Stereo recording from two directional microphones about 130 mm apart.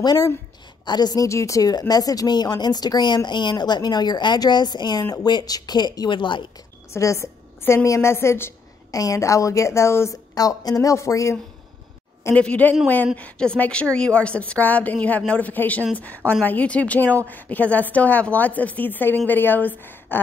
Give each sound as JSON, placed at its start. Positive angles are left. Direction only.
{"t": 0.0, "sound": "speech", "side_deg": 30}
{"t": 6.9, "sound": "a woman's voice", "side_deg": 20}
{"t": 12.4, "sound": "a woman's voice", "side_deg": 10}